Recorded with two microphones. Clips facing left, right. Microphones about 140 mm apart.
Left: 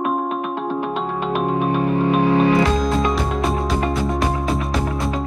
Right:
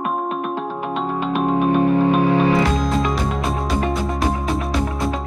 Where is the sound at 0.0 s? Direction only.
Centre (ahead or behind).